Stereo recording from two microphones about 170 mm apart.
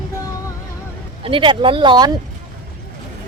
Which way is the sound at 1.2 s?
30° right (ahead or behind).